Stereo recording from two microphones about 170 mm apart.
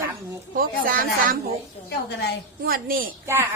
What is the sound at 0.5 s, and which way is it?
Speech, 55° right (ahead or behind).